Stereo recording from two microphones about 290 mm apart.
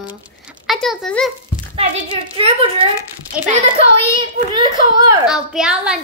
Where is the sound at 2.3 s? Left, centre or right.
Centre.